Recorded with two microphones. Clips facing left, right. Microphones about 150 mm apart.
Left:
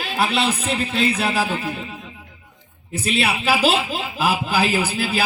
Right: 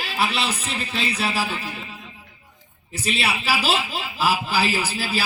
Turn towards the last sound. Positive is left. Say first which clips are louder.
# left 4 dB
turn(degrees=50)  # may be behind; listen again after turning